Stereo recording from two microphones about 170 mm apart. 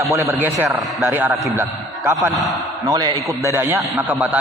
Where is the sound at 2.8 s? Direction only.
25° right (ahead or behind).